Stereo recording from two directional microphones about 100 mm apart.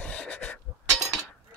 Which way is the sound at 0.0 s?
10° left (ahead or behind).